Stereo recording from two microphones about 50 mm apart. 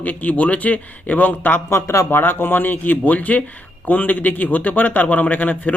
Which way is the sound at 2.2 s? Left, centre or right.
Left.